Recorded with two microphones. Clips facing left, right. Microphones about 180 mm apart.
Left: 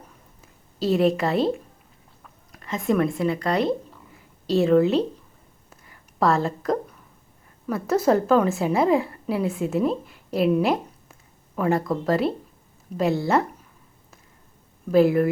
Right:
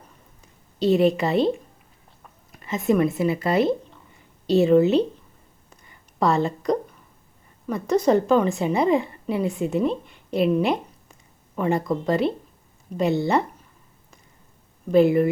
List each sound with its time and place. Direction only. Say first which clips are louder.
0.4 s a woman's voice: right 3 dB; centre (ahead or behind)
5.7 s a sound: left 1 dB; centre (ahead or behind)
7.7 s a woman's voice: right 1 dB; 5° left (ahead or behind)
14.8 s speech: right 1 dB; centre (ahead or behind)